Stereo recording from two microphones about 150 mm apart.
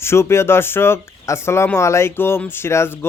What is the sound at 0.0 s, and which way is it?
Speech, 15° left (ahead or behind).